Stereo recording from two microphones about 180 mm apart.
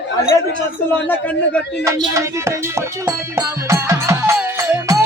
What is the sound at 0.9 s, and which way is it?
Speech, 10° left (ahead or behind).